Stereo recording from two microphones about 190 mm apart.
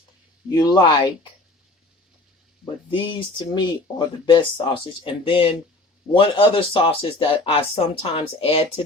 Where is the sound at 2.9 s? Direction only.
25° left (ahead or behind).